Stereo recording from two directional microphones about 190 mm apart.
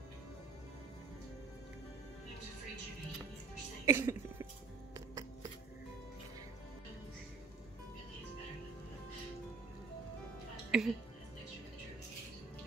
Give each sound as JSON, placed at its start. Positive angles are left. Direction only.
{"t": 3.8, "sound": "cough", "side_deg": -15}
{"t": 4.9, "sound": "music", "side_deg": -20}
{"t": 10.7, "sound": "speech", "side_deg": -5}